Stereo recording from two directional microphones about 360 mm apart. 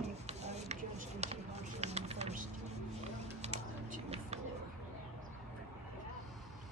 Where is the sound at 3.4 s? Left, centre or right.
Centre.